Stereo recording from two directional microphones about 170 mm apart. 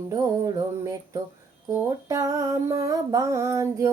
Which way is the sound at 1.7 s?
20° right (ahead or behind).